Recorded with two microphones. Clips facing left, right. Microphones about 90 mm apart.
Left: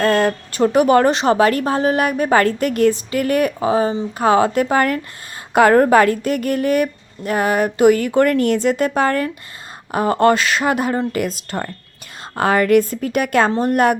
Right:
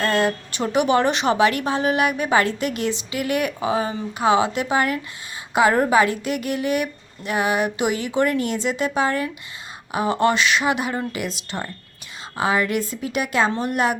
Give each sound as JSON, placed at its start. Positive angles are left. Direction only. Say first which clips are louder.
{"t": 0.0, "sound": "a woman's voice", "louder": "left 5 dB", "side_deg": 45}
{"t": 13.5, "sound": "a woman's voice", "louder": "left 6 dB", "side_deg": 40}